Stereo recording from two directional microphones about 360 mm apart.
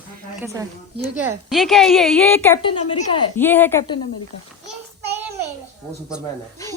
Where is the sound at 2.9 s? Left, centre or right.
Centre.